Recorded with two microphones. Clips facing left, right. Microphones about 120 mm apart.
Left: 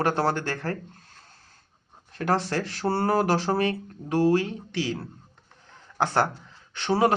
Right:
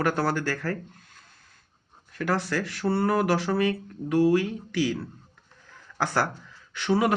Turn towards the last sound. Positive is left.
turn(degrees=30)  # may be behind; listen again after turning